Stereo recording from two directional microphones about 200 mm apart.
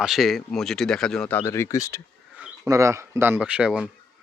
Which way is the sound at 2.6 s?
15° right (ahead or behind).